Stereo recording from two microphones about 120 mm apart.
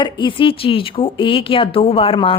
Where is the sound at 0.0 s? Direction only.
40° left (ahead or behind).